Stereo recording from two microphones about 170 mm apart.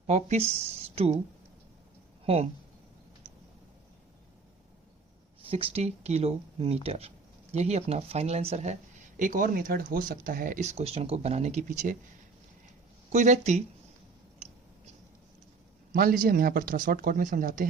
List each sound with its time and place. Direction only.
0.1 s speech: 40° right (ahead or behind)
2.2 s speech: 35° right (ahead or behind)
5.4 s speech: 35° right (ahead or behind)
13.1 s speech: 45° right (ahead or behind)
15.9 s speech: 55° right (ahead or behind)